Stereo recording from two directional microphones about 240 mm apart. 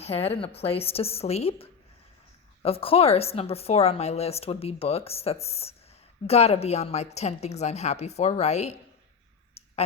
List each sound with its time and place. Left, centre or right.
0.0 s a woman's voice: left